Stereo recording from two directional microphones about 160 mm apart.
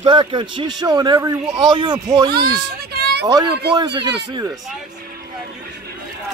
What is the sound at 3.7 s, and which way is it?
Speech, 30° right (ahead or behind).